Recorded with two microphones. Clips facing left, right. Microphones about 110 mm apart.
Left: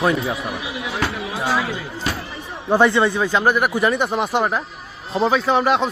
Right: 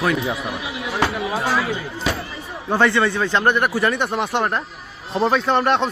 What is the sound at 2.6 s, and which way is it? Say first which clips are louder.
A man's voice: left 2 dB; 15° left (ahead or behind).